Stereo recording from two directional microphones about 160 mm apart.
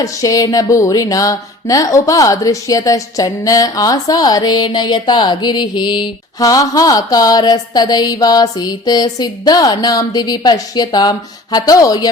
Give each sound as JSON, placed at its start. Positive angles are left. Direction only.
{"t": 0.0, "sound": "speech", "side_deg": 20}